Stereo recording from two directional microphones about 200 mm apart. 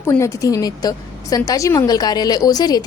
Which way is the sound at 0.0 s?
15° left (ahead or behind).